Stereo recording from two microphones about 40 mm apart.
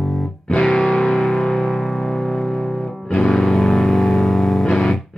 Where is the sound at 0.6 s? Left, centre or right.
Centre.